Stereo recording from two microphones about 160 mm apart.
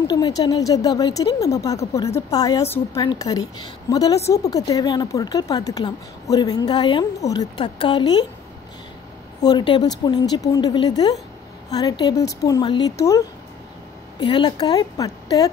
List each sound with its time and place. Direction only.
0.0 s a woman's voice: 25° left (ahead or behind)
9.4 s a woman's voice: 25° left (ahead or behind)